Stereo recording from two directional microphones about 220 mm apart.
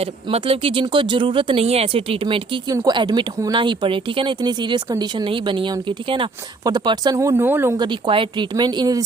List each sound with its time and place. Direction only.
0.0 s speech: 25° right (ahead or behind)